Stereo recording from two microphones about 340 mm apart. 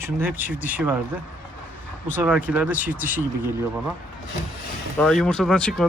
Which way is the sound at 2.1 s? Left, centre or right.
Centre.